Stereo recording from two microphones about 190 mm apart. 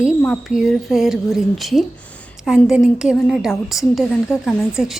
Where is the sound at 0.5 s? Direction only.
Centre (ahead or behind).